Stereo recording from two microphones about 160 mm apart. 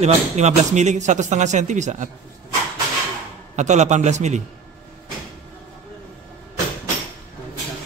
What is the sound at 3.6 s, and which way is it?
Speech, 45° right (ahead or behind).